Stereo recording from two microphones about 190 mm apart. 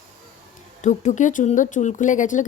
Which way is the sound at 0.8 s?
40° left (ahead or behind).